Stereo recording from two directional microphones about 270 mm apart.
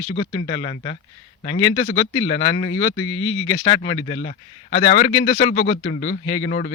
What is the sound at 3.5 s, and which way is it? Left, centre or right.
A man's voice, left.